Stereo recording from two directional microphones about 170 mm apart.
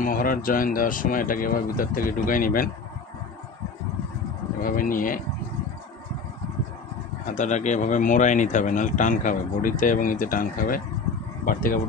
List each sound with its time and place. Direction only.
0.0 s speech: 55° left (ahead or behind)
4.6 s speech: 55° left (ahead or behind)
7.2 s speech: 45° left (ahead or behind)